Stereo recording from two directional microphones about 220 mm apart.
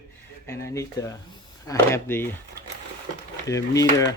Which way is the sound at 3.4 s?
15° left (ahead or behind).